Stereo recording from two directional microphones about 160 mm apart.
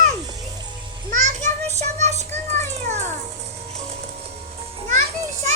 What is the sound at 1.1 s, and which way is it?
Child singing, 50° right (ahead or behind).